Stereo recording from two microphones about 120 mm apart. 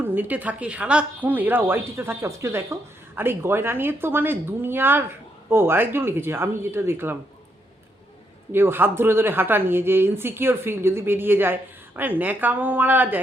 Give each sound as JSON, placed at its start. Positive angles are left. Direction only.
{"t": 0.0, "sound": "a woman's voice", "side_deg": -15}
{"t": 8.5, "sound": "a woman's voice", "side_deg": -20}